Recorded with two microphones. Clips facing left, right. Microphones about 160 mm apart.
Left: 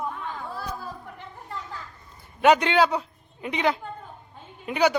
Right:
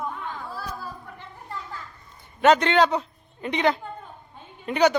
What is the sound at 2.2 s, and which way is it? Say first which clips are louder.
A man's voice: right 1 dB; 10° left (ahead or behind).